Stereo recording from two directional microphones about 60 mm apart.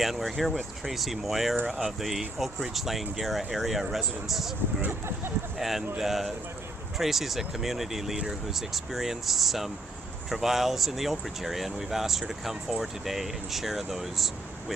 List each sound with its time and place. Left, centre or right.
0.0 s speech: centre
4.9 s speech: right
5.5 s speech: centre